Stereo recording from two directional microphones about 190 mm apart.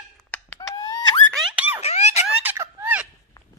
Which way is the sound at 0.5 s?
20° left (ahead or behind).